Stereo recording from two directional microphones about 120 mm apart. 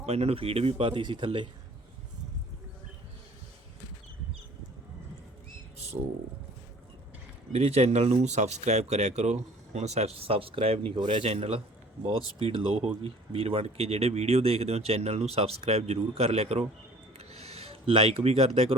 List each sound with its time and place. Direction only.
0.0 s speech: 60° right (ahead or behind); by 1.5 s 45° right (ahead or behind)
7.5 s speech: 60° right (ahead or behind)
17.2 s a sound: 55° right (ahead or behind)